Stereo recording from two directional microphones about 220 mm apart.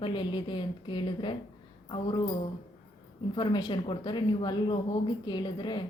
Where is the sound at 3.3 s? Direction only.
20° left (ahead or behind).